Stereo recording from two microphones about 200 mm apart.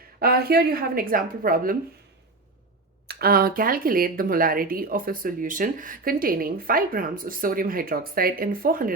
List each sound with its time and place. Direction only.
0.2 s speech: 50° right (ahead or behind)
3.1 s speech: 50° right (ahead or behind)